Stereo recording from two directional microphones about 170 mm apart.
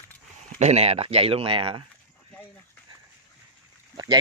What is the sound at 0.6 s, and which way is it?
Speech, 40° right (ahead or behind).